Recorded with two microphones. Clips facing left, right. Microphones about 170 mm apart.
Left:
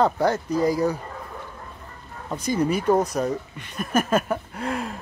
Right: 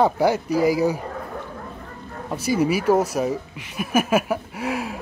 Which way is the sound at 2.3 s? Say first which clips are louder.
Right 2 dB; 5° right (ahead or behind).